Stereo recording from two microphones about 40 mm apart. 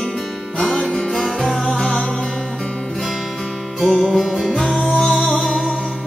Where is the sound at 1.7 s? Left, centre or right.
Centre.